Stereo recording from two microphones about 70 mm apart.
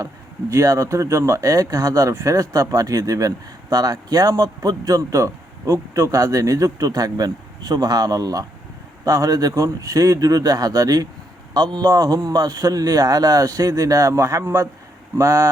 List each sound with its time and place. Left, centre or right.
0.5 s a man's voice: right